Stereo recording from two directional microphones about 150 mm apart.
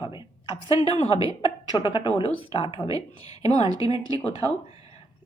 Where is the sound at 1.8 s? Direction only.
35° left (ahead or behind).